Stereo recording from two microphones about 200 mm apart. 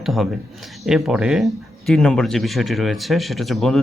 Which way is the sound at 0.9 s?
Centre (ahead or behind).